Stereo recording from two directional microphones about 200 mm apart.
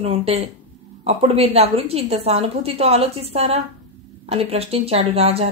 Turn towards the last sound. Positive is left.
turn(degrees=-30)  # may be behind; listen again after turning